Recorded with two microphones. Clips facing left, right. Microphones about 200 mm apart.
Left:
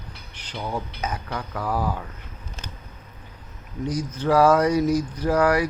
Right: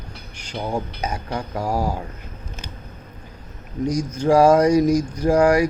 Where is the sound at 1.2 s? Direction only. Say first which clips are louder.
Right 4 dB; 35° right (ahead or behind).